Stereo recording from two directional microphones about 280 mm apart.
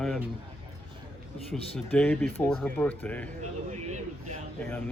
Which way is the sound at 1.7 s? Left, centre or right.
Centre.